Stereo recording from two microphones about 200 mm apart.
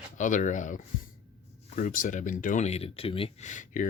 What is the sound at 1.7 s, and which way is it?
Speech, 45° left (ahead or behind).